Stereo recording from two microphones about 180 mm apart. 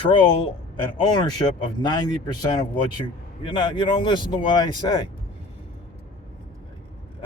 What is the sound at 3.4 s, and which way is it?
Speech, 25° left (ahead or behind).